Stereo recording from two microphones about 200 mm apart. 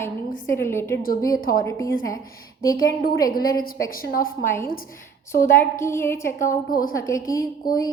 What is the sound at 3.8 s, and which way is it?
Speech, 45° left (ahead or behind).